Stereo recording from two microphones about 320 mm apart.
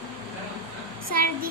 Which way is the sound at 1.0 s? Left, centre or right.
Right.